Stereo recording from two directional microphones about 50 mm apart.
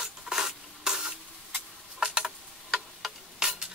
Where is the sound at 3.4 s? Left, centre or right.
Centre.